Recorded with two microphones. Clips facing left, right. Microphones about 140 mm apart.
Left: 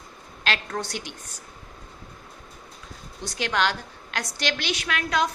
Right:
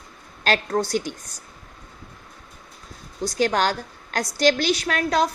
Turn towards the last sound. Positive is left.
turn(degrees=-40)  # may be behind; listen again after turning